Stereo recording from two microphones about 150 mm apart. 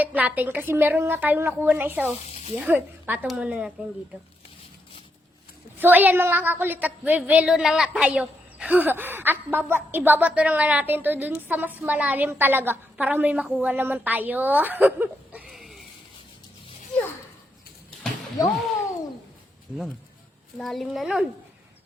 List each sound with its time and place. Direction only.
0.0 s a woman's voice: 10° right (ahead or behind)
2.2 s speech: 45° left (ahead or behind)
2.6 s a woman's voice: 10° right (ahead or behind)
5.7 s a woman's voice: 15° right (ahead or behind)
18.4 s a child's voice: 20° left (ahead or behind)
20.6 s speech: centre (ahead or behind)